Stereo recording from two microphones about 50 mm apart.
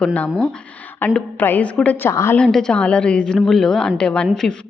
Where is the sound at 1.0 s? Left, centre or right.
Left.